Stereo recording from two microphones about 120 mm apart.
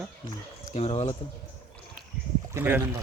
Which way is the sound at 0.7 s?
60° left (ahead or behind).